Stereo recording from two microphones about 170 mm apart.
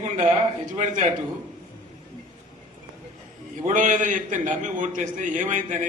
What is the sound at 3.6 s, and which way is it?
A man's voice, 50° right (ahead or behind).